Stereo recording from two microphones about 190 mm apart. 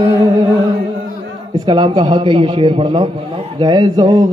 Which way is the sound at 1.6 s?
25° right (ahead or behind).